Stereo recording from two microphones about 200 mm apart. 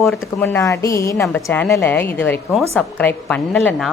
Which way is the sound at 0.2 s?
15° left (ahead or behind).